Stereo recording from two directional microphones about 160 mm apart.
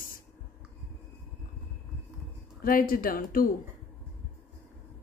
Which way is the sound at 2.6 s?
65° left (ahead or behind).